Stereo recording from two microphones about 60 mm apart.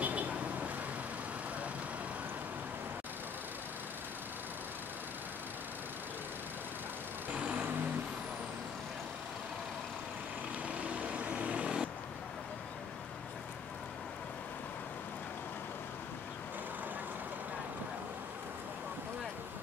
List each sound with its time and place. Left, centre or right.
0.0 s vehicle: right
7.3 s vehicle: centre
10.7 s vehicle: right